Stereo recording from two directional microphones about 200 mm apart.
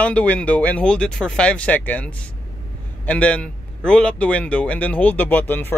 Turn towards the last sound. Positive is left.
turn(degrees=10)  # may be behind; listen again after turning